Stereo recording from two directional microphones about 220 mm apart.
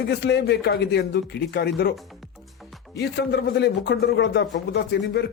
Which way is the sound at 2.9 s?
50° left (ahead or behind).